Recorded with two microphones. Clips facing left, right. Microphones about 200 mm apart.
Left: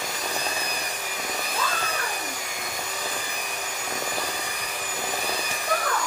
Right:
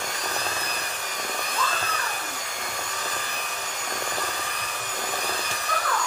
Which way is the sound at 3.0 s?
10° left (ahead or behind).